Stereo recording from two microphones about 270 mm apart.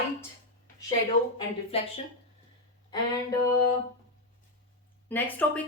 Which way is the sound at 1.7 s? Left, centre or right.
Left.